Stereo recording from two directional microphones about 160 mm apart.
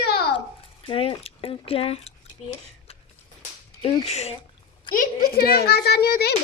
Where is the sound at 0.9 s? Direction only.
35° left (ahead or behind).